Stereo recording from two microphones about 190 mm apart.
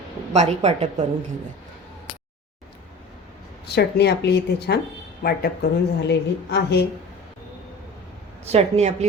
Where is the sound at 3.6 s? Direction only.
60° left (ahead or behind).